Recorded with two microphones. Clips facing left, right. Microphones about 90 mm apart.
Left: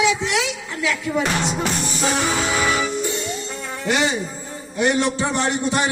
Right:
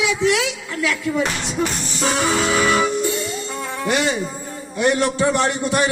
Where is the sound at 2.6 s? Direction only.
45° right (ahead or behind).